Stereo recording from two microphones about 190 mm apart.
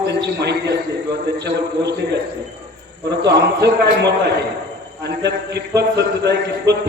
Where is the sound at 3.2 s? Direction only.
60° right (ahead or behind).